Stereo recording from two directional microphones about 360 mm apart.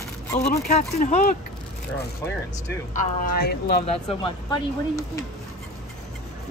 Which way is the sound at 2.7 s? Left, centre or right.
Left.